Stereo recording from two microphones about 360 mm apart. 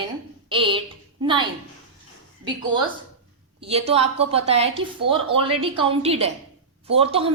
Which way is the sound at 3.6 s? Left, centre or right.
Centre.